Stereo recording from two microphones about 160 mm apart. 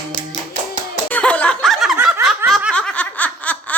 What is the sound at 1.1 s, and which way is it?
Snicker, 10° left (ahead or behind).